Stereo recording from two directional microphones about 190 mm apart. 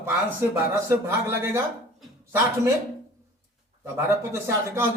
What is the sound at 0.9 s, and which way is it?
Speech, 10° right (ahead or behind).